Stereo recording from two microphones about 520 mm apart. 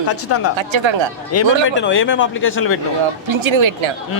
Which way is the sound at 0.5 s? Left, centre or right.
Right.